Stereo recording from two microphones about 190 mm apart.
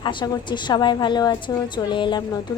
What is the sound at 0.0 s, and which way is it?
A woman's voice, 25° left (ahead or behind).